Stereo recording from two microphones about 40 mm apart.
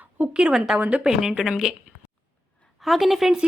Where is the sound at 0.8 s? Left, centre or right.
Right.